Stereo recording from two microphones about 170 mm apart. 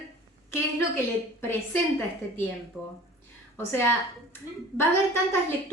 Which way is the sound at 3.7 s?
15° left (ahead or behind).